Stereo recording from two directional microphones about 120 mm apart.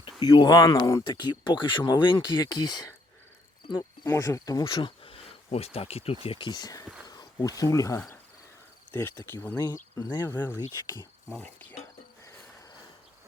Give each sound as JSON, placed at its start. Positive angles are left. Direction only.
{"t": 0.2, "sound": "speech", "side_deg": 35}
{"t": 4.6, "sound": "speech", "side_deg": 40}
{"t": 9.3, "sound": "cricket", "side_deg": 15}
{"t": 10.0, "sound": "speech", "side_deg": 35}
{"t": 11.3, "sound": "cricket", "side_deg": 10}